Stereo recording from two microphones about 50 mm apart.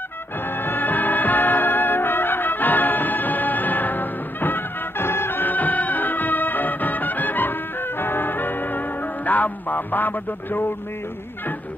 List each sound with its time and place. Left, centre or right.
0.5 s music: left